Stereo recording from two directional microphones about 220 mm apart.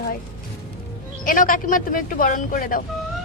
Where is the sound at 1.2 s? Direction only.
40° left (ahead or behind).